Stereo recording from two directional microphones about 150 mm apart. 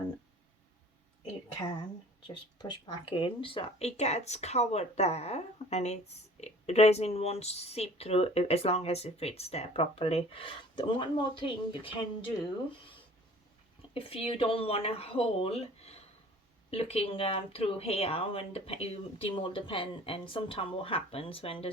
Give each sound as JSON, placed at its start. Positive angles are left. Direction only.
{"t": 2.2, "sound": "speech", "side_deg": 30}
{"t": 13.9, "sound": "speech", "side_deg": 40}